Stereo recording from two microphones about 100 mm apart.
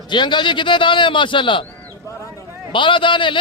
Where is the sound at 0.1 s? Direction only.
50° left (ahead or behind).